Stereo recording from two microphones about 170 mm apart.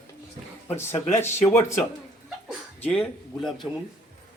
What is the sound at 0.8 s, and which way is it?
A man's voice, 15° left (ahead or behind).